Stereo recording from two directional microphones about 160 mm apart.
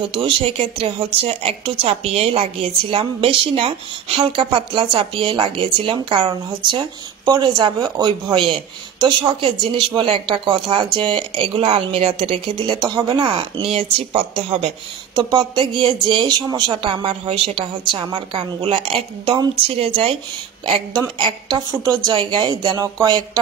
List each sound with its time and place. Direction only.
0.1 s a woman's voice: 35° right (ahead or behind)
12.6 s a woman's voice: 25° right (ahead or behind)